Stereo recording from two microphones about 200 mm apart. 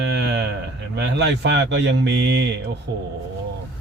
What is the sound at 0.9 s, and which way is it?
Speech, 60° right (ahead or behind).